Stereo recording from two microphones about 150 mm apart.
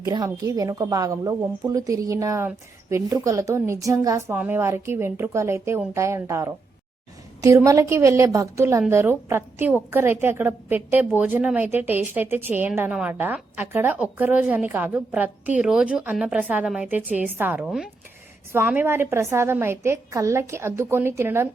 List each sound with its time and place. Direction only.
0.1 s a woman's voice: 20° right (ahead or behind)